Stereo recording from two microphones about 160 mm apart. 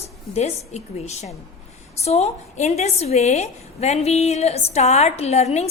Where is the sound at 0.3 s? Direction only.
45° left (ahead or behind).